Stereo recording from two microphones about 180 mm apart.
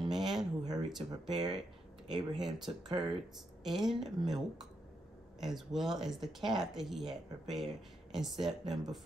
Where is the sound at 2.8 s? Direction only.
25° right (ahead or behind).